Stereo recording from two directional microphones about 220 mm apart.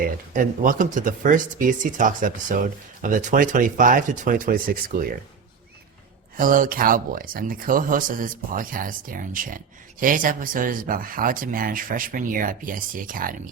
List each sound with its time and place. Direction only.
0.0 s speech: 40° right (ahead or behind)
6.3 s speech: 40° right (ahead or behind)